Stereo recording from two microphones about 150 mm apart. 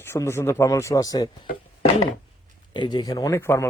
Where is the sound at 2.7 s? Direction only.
30° left (ahead or behind).